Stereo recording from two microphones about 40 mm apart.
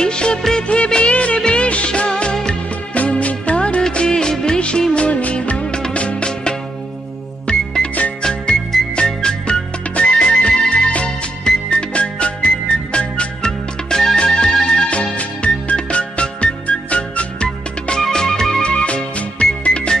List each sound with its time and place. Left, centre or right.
0.0 s music of bollywood: left
0.7 s music of bollywood: left
2.9 s music: left
4.9 s music of bollywood: left
5.9 s music: left
15.1 s music: left
18.1 s music: centre
18.7 s music: left